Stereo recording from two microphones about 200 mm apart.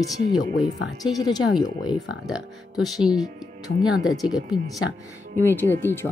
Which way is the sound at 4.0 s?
20° left (ahead or behind).